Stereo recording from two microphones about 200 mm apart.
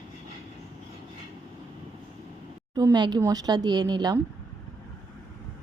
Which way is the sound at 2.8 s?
20° right (ahead or behind).